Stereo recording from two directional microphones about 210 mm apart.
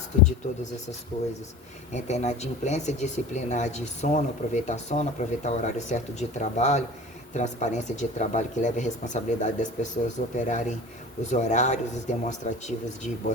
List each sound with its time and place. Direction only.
1.1 s speech: 20° left (ahead or behind)
1.9 s speech: 35° left (ahead or behind)